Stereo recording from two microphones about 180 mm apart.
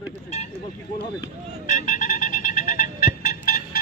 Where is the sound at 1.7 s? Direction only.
45° left (ahead or behind).